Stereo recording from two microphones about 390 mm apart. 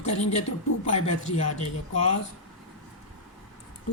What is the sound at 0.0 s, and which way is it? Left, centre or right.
Speech, centre.